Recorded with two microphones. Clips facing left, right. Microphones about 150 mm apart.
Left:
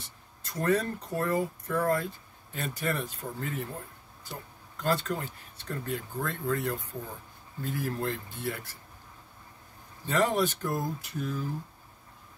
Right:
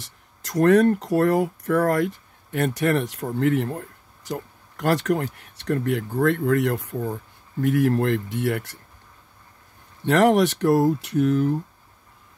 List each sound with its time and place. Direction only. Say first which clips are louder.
0.0 s speech: right 4 dB; 85° right
10.0 s speech: right 9 dB; 80° right